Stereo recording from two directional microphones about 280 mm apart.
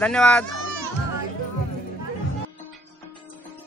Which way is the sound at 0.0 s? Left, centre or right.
Centre.